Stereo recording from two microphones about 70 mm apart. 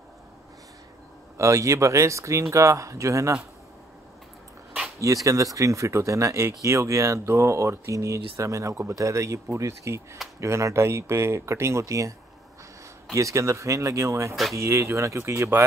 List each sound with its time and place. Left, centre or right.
1.4 s speech: right
5.0 s speech: right
13.1 s speech: right